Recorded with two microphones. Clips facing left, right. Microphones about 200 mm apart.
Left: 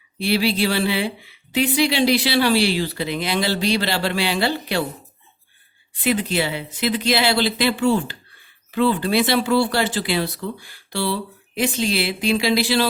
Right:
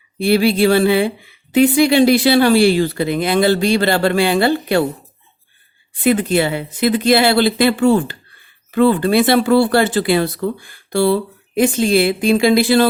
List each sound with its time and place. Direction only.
0.2 s speech: 50° right (ahead or behind)
6.0 s speech: 50° right (ahead or behind)